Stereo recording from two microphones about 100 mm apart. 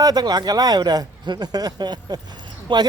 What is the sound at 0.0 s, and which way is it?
Speech, 40° right (ahead or behind).